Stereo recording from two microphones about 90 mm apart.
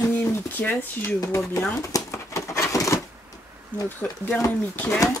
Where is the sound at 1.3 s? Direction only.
35° left (ahead or behind).